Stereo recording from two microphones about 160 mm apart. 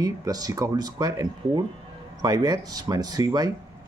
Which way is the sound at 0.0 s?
25° right (ahead or behind).